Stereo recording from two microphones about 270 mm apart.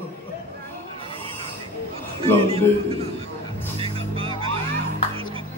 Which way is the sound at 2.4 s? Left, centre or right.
Right.